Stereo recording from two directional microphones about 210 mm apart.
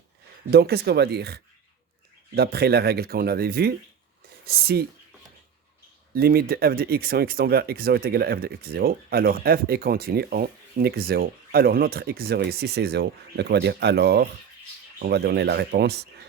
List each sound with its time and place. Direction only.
0.5 s speech: 50° right (ahead or behind)
6.1 s speech: 45° right (ahead or behind)